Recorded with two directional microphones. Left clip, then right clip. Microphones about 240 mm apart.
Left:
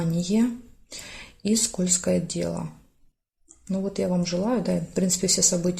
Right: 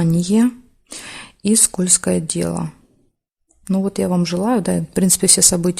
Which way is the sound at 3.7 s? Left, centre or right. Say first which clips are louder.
Right 6 dB; right.